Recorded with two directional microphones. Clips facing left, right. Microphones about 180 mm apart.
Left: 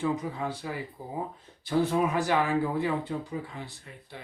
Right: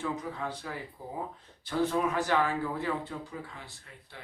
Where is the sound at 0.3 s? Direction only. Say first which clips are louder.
Left 4 dB; 10° left (ahead or behind).